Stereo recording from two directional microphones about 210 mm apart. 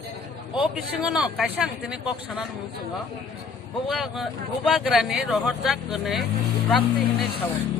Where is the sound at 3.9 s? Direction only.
Centre (ahead or behind).